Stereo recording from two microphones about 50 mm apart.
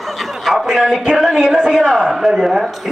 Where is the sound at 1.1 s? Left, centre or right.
Centre.